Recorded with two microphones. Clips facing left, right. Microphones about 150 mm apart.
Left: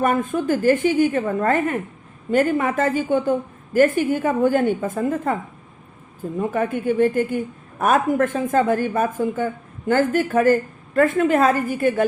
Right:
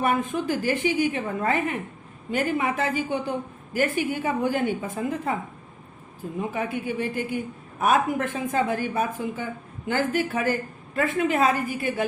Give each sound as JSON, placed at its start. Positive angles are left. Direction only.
{"t": 0.0, "sound": "a woman's voice", "side_deg": 45}
{"t": 6.5, "sound": "a woman's voice", "side_deg": 50}